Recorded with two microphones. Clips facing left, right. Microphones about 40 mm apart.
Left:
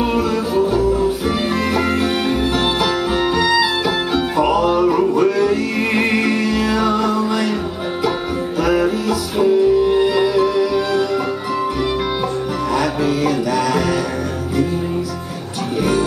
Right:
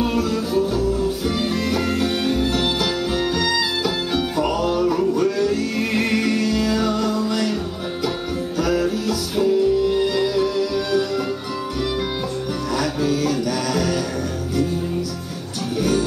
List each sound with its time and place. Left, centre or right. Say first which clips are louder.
0.0 s music: left 3 dB; centre
8.6 s music: left 5 dB; left
12.7 s music: left 3 dB; left